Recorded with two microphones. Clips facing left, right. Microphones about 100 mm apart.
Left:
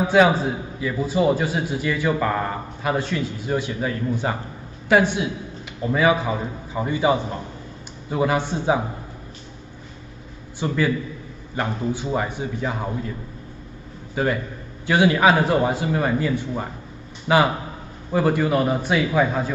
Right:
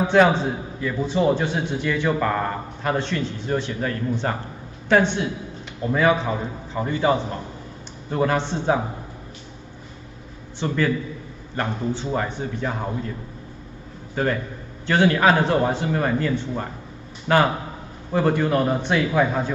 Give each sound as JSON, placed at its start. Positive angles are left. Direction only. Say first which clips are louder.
{"t": 0.0, "sound": "a man's voice", "louder": "even", "side_deg": 5}
{"t": 10.6, "sound": "a man's voice", "louder": "even", "side_deg": 5}
{"t": 14.1, "sound": "a man's voice", "louder": "left 1 dB", "side_deg": 5}